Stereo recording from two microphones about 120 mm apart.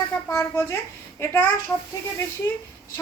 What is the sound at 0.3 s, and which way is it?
A woman's voice, 20° left (ahead or behind).